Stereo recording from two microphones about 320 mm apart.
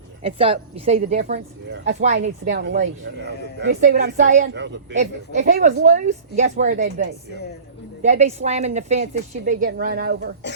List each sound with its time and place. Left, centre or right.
0.2 s a woman's voice: centre; by 10.3 s right